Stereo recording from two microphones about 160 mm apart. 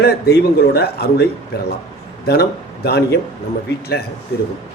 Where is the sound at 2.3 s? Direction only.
85° left.